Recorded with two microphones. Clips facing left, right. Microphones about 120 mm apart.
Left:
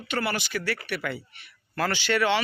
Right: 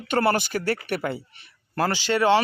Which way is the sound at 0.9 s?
35° right (ahead or behind).